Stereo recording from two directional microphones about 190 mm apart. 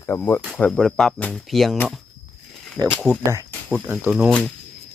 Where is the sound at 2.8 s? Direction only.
15° right (ahead or behind).